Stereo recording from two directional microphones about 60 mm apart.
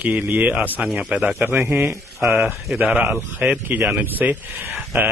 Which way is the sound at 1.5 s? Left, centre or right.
Right.